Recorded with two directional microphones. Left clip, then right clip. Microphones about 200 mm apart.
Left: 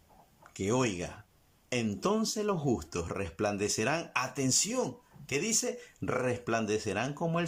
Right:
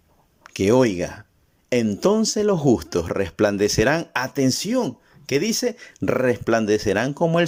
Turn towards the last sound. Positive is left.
turn(degrees=-35)  # may be behind; listen again after turning